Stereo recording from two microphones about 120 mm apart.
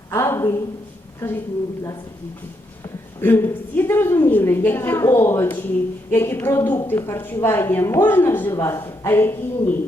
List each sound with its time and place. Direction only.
0.1 s a woman's voice: 20° left (ahead or behind)
3.2 s a woman's voice: 20° left (ahead or behind)